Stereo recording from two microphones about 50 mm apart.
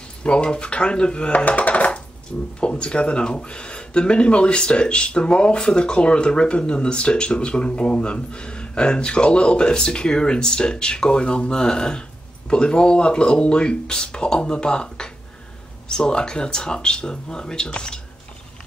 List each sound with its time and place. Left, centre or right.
0.2 s speech: centre
2.3 s speech: centre